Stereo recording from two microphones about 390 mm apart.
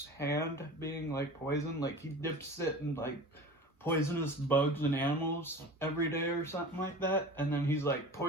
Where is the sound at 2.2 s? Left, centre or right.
Centre.